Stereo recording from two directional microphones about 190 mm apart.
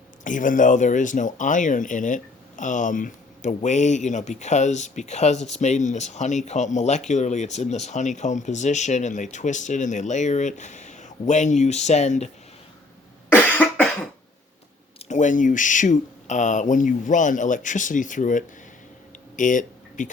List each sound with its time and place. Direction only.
0.3 s speech: 45° left (ahead or behind)
13.3 s cough: 5° left (ahead or behind)
15.0 s speech: 40° left (ahead or behind)
19.4 s a sound: 40° left (ahead or behind)